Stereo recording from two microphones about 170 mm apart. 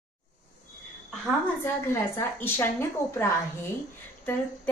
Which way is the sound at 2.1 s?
15° left (ahead or behind).